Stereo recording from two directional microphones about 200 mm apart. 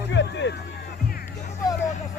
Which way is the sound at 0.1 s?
60° left (ahead or behind).